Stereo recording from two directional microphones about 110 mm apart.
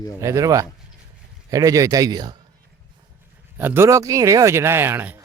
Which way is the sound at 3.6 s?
20° right (ahead or behind).